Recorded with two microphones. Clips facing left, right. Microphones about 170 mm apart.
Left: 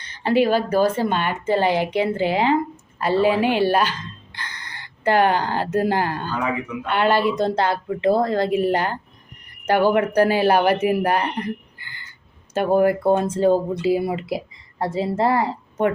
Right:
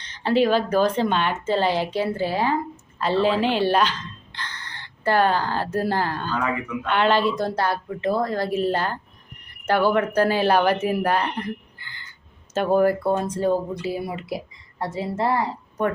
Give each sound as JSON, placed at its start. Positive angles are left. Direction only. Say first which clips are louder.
{"t": 0.0, "sound": "speech", "louder": "left 1 dB", "side_deg": 10}
{"t": 12.5, "sound": "speech", "louder": "left 1 dB", "side_deg": 15}